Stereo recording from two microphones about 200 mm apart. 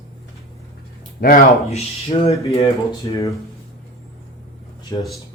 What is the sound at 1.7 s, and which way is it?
Speech, 30° left (ahead or behind).